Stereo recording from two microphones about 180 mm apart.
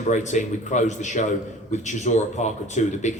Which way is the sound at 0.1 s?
40° left (ahead or behind).